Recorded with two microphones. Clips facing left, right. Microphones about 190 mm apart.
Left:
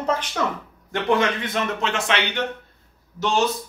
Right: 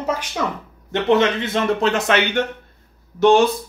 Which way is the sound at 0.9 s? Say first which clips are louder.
Right 4 dB; 25° right (ahead or behind).